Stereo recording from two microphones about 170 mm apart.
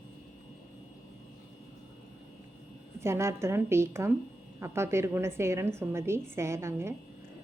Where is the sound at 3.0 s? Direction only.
15° right (ahead or behind).